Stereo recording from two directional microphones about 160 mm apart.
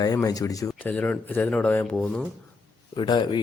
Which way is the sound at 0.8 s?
10° left (ahead or behind).